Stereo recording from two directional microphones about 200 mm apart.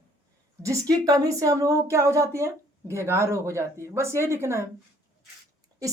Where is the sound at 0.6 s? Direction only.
15° right (ahead or behind).